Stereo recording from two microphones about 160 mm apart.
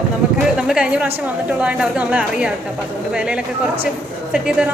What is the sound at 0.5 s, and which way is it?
A woman's voice, 5° right (ahead or behind).